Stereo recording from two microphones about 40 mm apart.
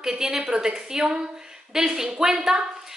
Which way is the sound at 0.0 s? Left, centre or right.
Centre.